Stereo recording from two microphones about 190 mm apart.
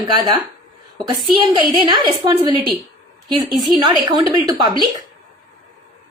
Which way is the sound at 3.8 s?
20° right (ahead or behind).